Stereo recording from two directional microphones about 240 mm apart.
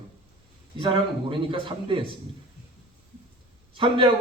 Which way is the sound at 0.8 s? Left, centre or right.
Right.